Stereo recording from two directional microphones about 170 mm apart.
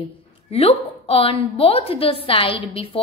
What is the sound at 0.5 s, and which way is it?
A woman's voice, 35° left (ahead or behind).